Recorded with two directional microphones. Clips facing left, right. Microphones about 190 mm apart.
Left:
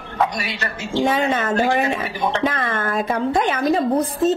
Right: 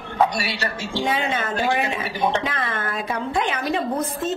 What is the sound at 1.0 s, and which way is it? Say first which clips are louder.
A woman's voice: left 5 dB; 45° left (ahead or behind).